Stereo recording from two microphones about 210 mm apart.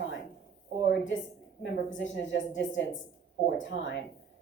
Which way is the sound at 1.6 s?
65° left (ahead or behind).